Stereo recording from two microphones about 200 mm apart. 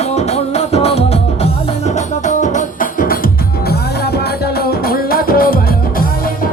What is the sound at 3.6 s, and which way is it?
Music, 55° left (ahead or behind).